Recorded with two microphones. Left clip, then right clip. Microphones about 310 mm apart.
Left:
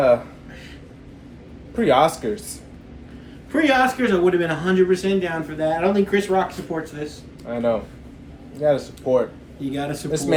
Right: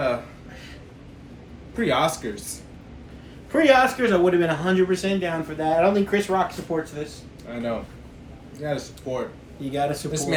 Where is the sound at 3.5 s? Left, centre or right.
Centre.